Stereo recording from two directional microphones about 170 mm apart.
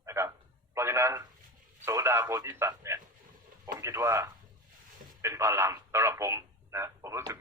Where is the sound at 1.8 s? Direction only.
15° right (ahead or behind).